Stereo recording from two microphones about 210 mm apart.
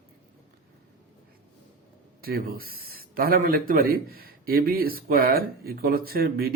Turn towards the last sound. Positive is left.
turn(degrees=-45)  # may be behind; listen again after turning